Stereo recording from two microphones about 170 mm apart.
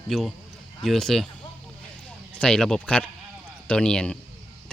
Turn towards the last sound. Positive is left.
turn(degrees=5)  # may be behind; listen again after turning